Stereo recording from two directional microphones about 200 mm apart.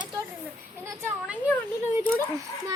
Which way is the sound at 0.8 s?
10° right (ahead or behind).